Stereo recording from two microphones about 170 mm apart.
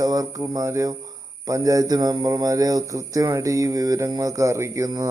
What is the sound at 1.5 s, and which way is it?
A man's voice, 20° right (ahead or behind).